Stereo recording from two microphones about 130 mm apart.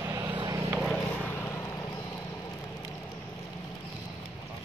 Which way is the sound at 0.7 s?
5° left (ahead or behind).